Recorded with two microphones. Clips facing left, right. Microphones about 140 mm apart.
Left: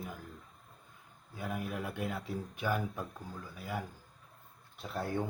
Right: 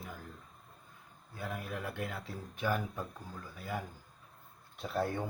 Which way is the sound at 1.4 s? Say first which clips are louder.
Left 2 dB; 15° left (ahead or behind).